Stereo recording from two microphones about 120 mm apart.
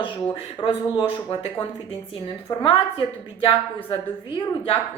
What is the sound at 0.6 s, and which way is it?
A woman's voice, 45° left (ahead or behind).